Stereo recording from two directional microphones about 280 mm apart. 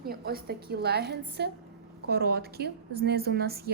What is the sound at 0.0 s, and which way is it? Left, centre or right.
A woman's voice, right.